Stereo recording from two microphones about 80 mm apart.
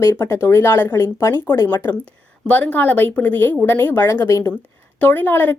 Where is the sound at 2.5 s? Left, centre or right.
Left.